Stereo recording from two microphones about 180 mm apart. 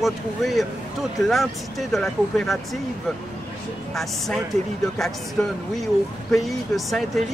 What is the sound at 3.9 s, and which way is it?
Speech, centre (ahead or behind).